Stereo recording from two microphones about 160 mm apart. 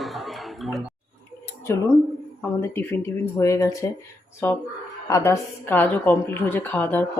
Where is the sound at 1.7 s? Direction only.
15° left (ahead or behind).